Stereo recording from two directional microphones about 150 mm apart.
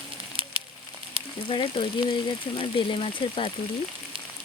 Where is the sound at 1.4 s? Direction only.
35° left (ahead or behind).